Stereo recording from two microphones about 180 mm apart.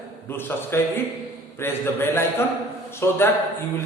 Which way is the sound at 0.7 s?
15° left (ahead or behind).